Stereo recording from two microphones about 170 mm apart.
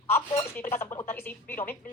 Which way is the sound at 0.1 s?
15° left (ahead or behind).